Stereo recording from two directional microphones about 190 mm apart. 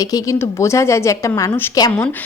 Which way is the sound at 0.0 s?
20° left (ahead or behind).